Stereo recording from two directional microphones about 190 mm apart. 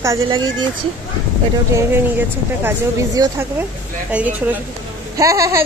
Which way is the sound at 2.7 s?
15° right (ahead or behind).